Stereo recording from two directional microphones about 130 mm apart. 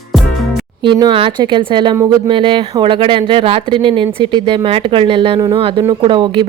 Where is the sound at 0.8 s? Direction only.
35° right (ahead or behind).